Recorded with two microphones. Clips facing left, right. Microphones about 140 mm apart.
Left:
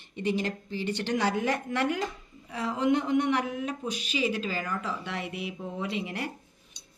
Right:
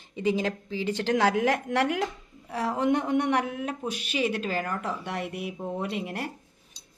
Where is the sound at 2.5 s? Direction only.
60° right (ahead or behind).